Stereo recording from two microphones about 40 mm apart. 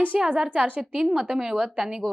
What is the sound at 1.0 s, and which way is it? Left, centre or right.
Speech, centre.